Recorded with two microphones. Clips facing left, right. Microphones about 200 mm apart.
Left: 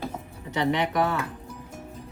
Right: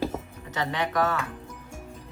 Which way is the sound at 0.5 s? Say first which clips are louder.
Left 3 dB; 20° left (ahead or behind).